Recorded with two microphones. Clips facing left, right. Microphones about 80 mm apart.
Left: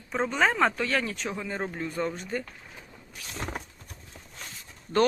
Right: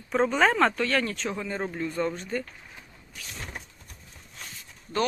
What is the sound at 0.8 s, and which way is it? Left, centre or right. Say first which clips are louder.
Speech: right 2 dB; centre.